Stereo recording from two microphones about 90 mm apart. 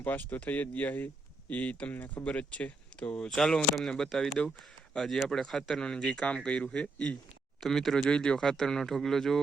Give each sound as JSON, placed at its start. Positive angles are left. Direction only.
{"t": 0.0, "sound": "speech", "side_deg": 20}